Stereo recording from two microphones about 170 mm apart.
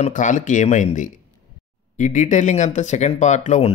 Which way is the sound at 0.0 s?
45° left (ahead or behind).